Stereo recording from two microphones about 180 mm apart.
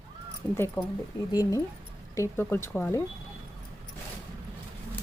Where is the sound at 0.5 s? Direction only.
15° left (ahead or behind).